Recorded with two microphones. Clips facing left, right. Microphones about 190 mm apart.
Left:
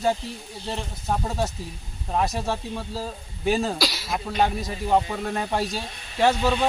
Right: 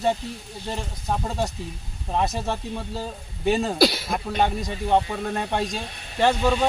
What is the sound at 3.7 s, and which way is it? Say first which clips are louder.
Speech: right 8 dB; 55° right (ahead or behind).